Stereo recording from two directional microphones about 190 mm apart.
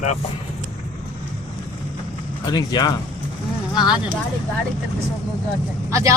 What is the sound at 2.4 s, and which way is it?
Speech, 20° left (ahead or behind).